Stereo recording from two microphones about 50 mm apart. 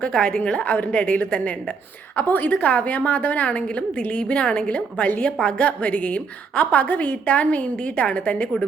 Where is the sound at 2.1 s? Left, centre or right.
Left.